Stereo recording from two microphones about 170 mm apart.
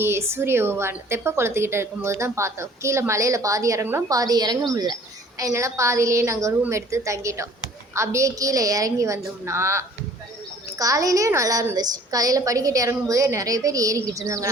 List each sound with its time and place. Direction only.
0.0 s a woman's voice: 15° right (ahead or behind)